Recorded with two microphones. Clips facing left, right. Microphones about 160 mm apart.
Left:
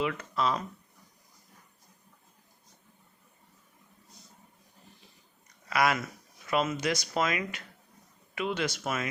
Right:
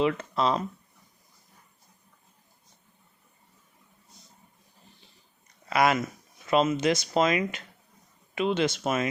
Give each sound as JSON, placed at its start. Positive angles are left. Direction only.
{"t": 0.0, "sound": "speech", "side_deg": -30}
{"t": 5.6, "sound": "speech", "side_deg": -25}